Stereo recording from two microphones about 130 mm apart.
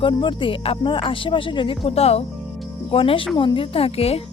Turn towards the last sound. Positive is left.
turn(degrees=50)  # may be behind; listen again after turning